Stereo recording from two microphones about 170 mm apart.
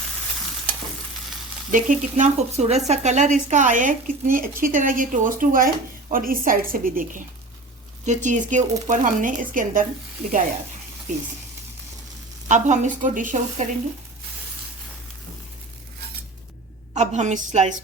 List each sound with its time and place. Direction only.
1.7 s speech: 45° right (ahead or behind)
12.5 s speech: 45° right (ahead or behind)
16.9 s speech: 45° right (ahead or behind)